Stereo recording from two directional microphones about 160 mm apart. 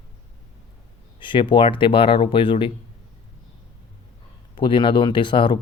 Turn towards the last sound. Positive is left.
turn(degrees=30)  # may be behind; listen again after turning